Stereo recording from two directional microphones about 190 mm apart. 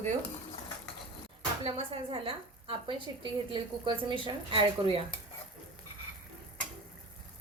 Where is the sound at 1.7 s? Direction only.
30° right (ahead or behind).